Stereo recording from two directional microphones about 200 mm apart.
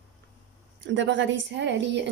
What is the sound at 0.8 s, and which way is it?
A woman's voice, 65° right (ahead or behind).